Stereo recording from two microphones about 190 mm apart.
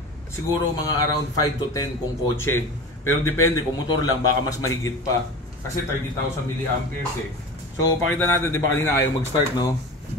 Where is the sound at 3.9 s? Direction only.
20° left (ahead or behind).